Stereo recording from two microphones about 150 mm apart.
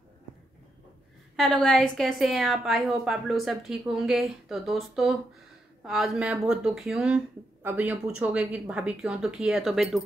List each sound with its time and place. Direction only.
1.3 s a woman's voice: 5° left (ahead or behind)